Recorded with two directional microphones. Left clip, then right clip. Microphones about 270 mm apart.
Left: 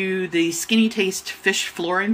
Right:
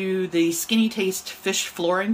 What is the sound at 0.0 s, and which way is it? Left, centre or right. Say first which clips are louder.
Speech: left 1 dB; centre.